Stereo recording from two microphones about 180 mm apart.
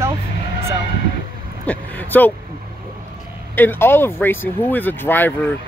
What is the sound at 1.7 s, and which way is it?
Speech, 10° left (ahead or behind).